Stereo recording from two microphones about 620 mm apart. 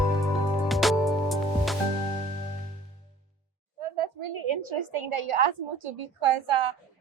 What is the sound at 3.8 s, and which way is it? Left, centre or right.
A woman's voice, right.